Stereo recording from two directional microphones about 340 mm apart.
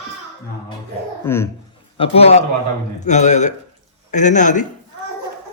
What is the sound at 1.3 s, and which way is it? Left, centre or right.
Speech, centre.